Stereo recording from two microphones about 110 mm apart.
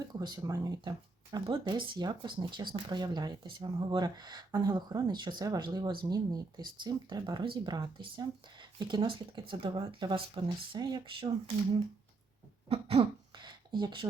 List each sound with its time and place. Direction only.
0.0 s speech: 40° right (ahead or behind)
12.6 s cough: 65° right (ahead or behind)
13.3 s a sound: 40° right (ahead or behind)